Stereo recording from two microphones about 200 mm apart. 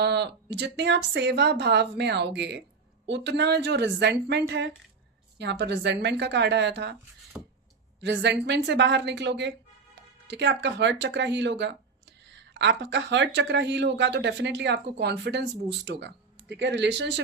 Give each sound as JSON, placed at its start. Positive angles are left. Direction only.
{"t": 0.0, "sound": "speech", "side_deg": -55}
{"t": 7.3, "sound": "a sound", "side_deg": -10}
{"t": 8.0, "sound": "speech", "side_deg": -60}